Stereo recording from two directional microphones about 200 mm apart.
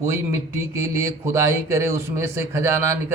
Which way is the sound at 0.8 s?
15° right (ahead or behind).